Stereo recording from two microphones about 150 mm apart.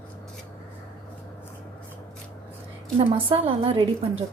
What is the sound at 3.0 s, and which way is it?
Speech, 35° right (ahead or behind).